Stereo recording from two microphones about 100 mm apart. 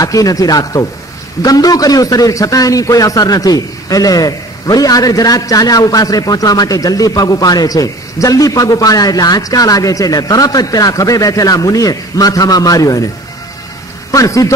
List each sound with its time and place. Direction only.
0.0 s a man's voice: 35° left (ahead or behind)
14.1 s a man's voice: 35° left (ahead or behind)